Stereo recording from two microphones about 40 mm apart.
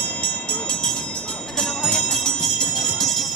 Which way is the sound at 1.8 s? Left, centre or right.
Left.